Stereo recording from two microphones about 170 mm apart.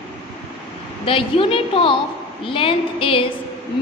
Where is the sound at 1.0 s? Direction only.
30° left (ahead or behind).